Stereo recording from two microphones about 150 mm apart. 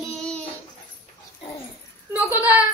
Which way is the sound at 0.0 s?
5° left (ahead or behind).